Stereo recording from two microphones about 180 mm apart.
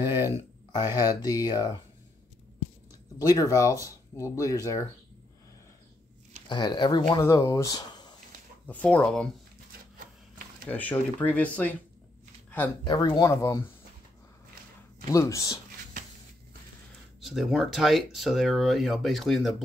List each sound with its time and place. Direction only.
0.7 s speech: 20° left (ahead or behind)
3.2 s speech: 20° left (ahead or behind)
6.5 s speech: 25° left (ahead or behind)
8.6 s speech: 5° left (ahead or behind)
10.7 s speech: 10° left (ahead or behind)
12.4 s a sound: 10° left (ahead or behind)
12.8 s speech: 25° left (ahead or behind)
15.0 s speech: 20° left (ahead or behind)
17.2 s speech: centre (ahead or behind)